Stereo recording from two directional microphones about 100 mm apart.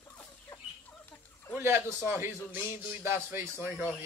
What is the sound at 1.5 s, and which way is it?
A man's voice, 25° right (ahead or behind).